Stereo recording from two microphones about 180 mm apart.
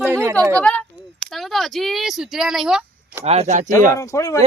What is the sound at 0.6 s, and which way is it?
Speech, 5° left (ahead or behind).